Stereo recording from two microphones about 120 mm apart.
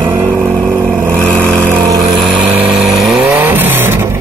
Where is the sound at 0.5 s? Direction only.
5° left (ahead or behind).